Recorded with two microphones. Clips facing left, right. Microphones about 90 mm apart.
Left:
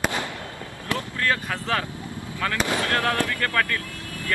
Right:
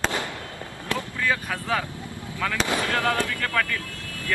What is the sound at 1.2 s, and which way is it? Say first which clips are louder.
Speech: left 1 dB; 5° right (ahead or behind).